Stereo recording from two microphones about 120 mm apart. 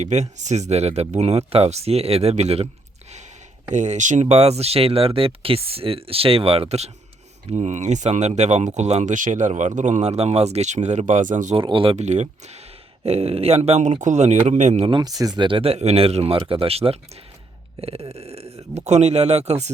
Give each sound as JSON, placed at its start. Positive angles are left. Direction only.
{"t": 0.0, "sound": "speech", "side_deg": -70}
{"t": 3.7, "sound": "speech", "side_deg": -85}
{"t": 7.5, "sound": "speech", "side_deg": -80}
{"t": 11.5, "sound": "speech", "side_deg": -45}
{"t": 11.9, "sound": "speech", "side_deg": -70}
{"t": 13.1, "sound": "speech", "side_deg": -55}
{"t": 14.8, "sound": "speech", "side_deg": -35}